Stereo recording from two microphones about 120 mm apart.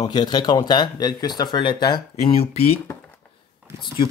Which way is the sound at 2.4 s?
60° left (ahead or behind).